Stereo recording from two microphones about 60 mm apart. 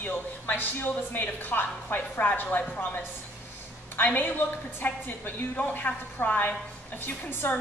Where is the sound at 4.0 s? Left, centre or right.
Left.